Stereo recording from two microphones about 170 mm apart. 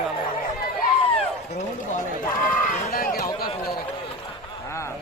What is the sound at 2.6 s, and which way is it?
Run, 55° left (ahead or behind).